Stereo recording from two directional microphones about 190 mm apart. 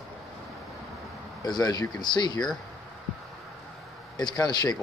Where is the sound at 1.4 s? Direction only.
20° left (ahead or behind).